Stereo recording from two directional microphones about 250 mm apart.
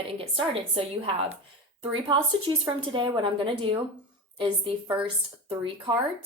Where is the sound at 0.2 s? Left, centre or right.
Right.